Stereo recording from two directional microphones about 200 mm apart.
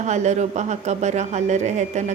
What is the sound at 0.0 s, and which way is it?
Speech, 35° right (ahead or behind).